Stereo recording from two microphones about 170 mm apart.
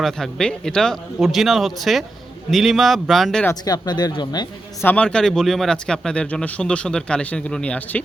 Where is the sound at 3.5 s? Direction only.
25° left (ahead or behind).